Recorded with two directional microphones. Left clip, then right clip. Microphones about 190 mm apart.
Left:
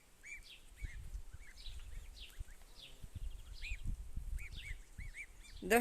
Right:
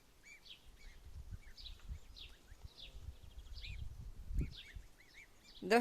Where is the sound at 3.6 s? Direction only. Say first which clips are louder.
Left 4 dB; 55° left (ahead or behind).